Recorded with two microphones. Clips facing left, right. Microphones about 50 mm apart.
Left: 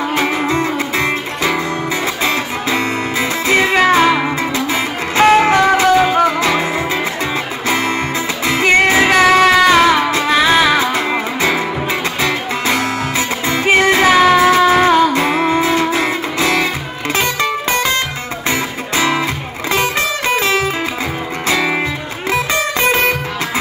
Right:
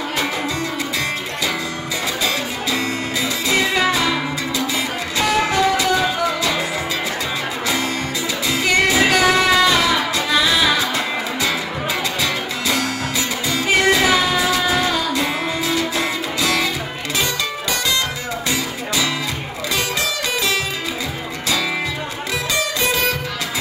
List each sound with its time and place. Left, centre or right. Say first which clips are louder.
0.1 s music: left 6 dB; left
7.6 s music: left 6 dB; left
12.2 s music: left 5 dB; left